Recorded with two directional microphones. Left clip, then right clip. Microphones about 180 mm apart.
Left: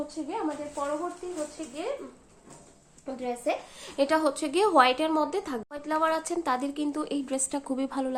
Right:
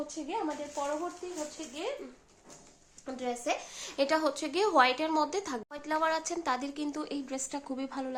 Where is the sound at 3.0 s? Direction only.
20° right (ahead or behind).